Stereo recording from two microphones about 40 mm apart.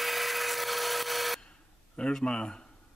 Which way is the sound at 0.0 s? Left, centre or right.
Centre.